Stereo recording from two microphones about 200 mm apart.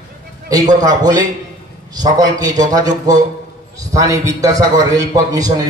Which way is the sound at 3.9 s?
15° right (ahead or behind).